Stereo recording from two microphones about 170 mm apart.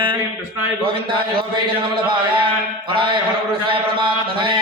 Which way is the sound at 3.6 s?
30° right (ahead or behind).